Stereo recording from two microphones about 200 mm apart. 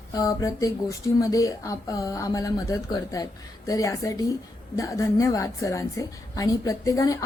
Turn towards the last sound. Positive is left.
turn(degrees=15)  # may be behind; listen again after turning